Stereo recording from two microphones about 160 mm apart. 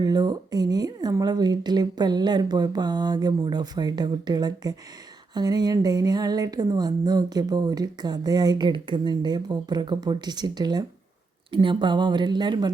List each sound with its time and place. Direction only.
0.0 s speech: 25° right (ahead or behind)